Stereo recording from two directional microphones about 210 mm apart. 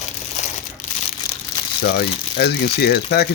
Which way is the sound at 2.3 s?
50° left (ahead or behind).